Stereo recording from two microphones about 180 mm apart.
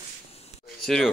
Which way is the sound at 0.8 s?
5° left (ahead or behind).